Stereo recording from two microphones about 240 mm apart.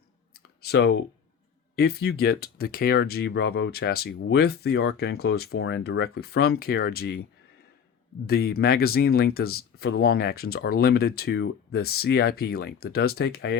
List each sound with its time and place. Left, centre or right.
0.3 s clicking: left
1.8 s speech: left
8.3 s speech: left